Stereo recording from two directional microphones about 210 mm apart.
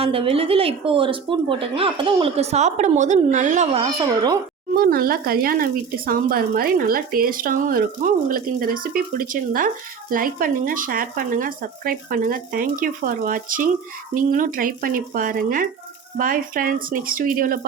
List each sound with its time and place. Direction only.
0.0 s a woman's voice: 25° right (ahead or behind)
4.8 s a woman's voice: 45° right (ahead or behind)